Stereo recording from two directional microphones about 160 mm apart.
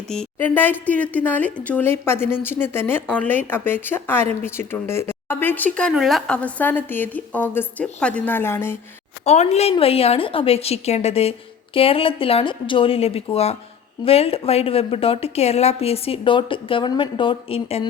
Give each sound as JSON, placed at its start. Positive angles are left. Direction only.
{"t": 0.3, "sound": "speech", "side_deg": 10}
{"t": 9.2, "sound": "a woman's voice", "side_deg": 45}